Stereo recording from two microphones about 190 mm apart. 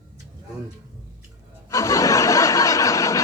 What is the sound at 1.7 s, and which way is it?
Snicker, 15° left (ahead or behind).